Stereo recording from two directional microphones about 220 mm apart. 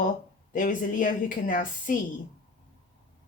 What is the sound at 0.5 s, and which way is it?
Speech, 35° left (ahead or behind).